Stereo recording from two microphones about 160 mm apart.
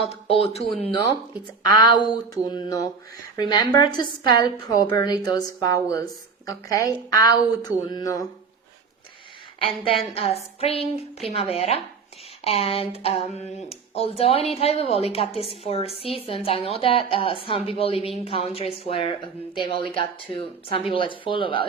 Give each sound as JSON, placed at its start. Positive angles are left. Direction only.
{"t": 0.0, "sound": "a woman's voice", "side_deg": 35}
{"t": 9.6, "sound": "a woman's voice", "side_deg": 35}